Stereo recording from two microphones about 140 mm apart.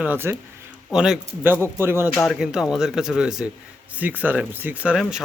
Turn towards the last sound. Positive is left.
turn(degrees=-5)  # may be behind; listen again after turning